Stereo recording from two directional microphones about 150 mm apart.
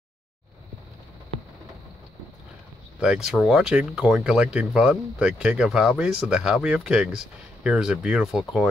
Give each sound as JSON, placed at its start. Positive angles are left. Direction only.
{"t": 3.0, "sound": "speech", "side_deg": -5}